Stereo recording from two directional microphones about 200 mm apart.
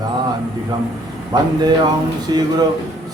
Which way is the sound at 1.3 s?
20° right (ahead or behind).